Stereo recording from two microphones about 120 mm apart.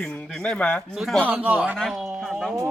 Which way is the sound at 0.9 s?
Centre (ahead or behind).